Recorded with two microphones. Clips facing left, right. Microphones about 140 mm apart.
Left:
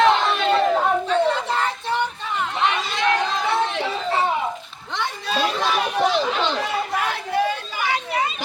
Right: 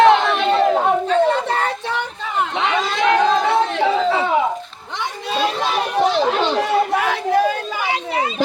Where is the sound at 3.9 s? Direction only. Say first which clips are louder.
Right 5 dB; 90° right.